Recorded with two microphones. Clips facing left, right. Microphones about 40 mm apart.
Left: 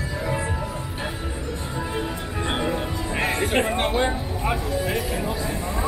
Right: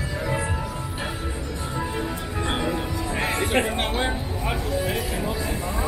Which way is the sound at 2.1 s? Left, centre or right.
Centre.